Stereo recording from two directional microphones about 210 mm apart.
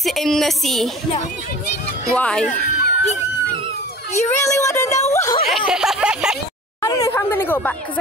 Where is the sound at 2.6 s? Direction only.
45° left (ahead or behind).